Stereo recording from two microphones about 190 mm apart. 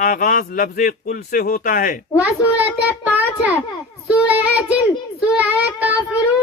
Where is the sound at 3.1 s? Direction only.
5° right (ahead or behind).